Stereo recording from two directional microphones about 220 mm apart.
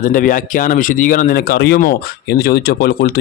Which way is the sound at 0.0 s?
40° left (ahead or behind).